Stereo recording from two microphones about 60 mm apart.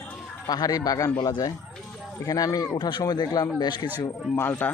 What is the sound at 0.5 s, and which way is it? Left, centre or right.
A man's voice, left.